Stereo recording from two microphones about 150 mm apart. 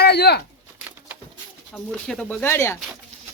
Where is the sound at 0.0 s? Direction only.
90° left.